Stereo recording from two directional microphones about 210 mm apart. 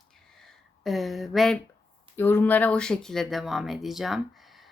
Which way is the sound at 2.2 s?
10° left (ahead or behind).